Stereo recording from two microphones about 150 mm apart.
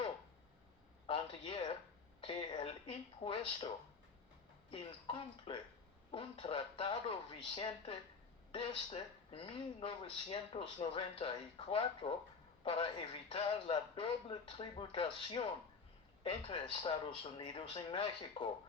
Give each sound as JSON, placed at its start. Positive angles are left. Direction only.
{"t": 1.0, "sound": "a sound", "side_deg": 35}
{"t": 2.2, "sound": "speech", "side_deg": 35}
{"t": 4.7, "sound": "speech", "side_deg": 35}